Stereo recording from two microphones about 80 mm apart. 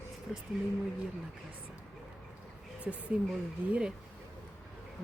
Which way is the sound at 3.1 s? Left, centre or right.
Centre.